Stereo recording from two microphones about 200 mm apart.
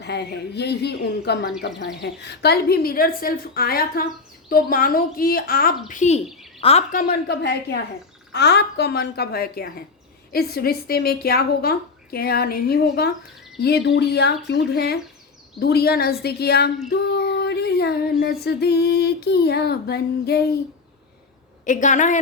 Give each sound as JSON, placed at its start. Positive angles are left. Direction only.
{"t": 0.0, "sound": "speech", "side_deg": 55}
{"t": 2.0, "sound": "female singing", "side_deg": 55}
{"t": 6.2, "sound": "bird", "side_deg": 0}
{"t": 6.6, "sound": "speech", "side_deg": 30}
{"t": 6.9, "sound": "female singing", "side_deg": 50}
{"t": 13.6, "sound": "speech", "side_deg": 55}
{"t": 15.5, "sound": "female singing", "side_deg": 50}
{"t": 21.6, "sound": "a woman's voice", "side_deg": 40}